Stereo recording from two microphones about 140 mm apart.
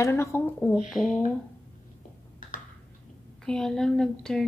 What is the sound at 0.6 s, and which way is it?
Speech, 10° left (ahead or behind).